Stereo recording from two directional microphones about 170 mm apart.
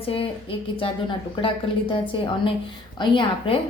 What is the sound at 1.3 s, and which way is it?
A woman's voice, 30° left (ahead or behind).